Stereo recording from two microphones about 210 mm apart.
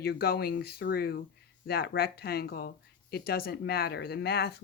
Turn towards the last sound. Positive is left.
turn(degrees=50)  # may be behind; listen again after turning